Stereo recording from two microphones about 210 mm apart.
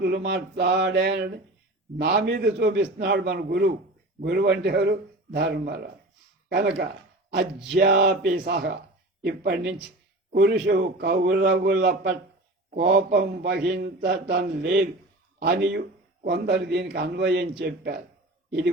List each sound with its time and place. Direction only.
0.0 s speech: 50° right (ahead or behind)